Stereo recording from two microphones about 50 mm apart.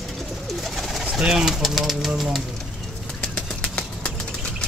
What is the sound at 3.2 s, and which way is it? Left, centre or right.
Bird flight, centre.